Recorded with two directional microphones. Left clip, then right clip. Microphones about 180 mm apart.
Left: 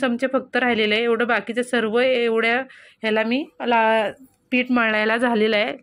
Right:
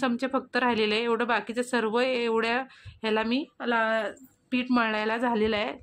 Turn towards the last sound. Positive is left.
turn(degrees=15)  # may be behind; listen again after turning